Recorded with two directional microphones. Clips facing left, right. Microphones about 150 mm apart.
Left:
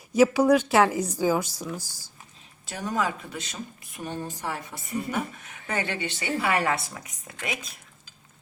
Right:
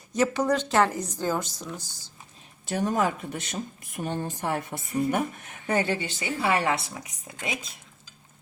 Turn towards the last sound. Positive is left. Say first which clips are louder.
# even
turn(degrees=-20)  # may be behind; listen again after turning